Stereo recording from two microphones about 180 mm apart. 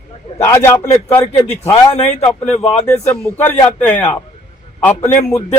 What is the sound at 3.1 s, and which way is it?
A man's voice, 10° left (ahead or behind).